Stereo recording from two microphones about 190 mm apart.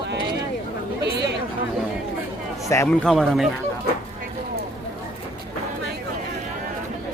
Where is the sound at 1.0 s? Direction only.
60° right (ahead or behind).